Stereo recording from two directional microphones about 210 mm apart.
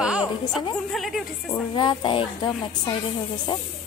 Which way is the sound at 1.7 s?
20° left (ahead or behind).